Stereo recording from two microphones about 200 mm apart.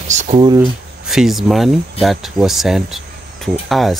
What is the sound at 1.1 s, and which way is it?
Speech, centre (ahead or behind).